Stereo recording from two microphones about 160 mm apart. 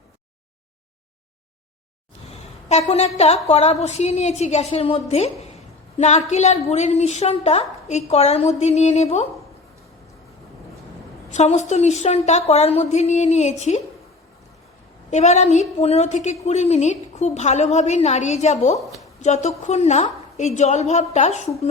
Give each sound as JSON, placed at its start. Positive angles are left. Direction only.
{"t": 2.6, "sound": "a woman's voice", "side_deg": 40}
{"t": 11.3, "sound": "a woman's voice", "side_deg": 45}
{"t": 15.1, "sound": "a woman's voice", "side_deg": 45}